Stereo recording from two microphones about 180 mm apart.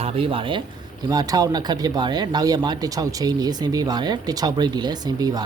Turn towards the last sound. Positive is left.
turn(degrees=-20)  # may be behind; listen again after turning